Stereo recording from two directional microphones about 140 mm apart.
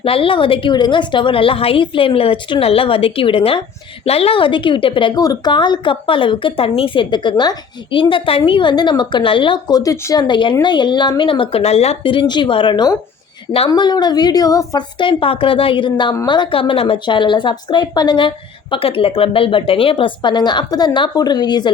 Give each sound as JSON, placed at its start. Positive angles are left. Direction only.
{"t": 0.0, "sound": "a woman's voice", "side_deg": 40}